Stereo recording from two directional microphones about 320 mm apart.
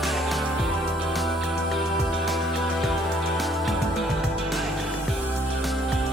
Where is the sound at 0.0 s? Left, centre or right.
Centre.